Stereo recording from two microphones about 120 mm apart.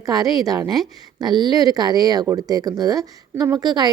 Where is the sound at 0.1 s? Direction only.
30° right (ahead or behind).